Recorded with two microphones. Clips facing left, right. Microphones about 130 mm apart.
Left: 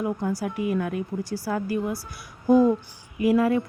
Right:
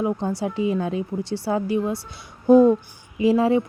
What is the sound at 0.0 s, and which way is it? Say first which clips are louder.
A woman's voice: right 3 dB; 25° right (ahead or behind).